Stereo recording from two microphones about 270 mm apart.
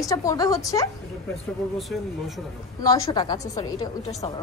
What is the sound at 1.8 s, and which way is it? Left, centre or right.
Speech, centre.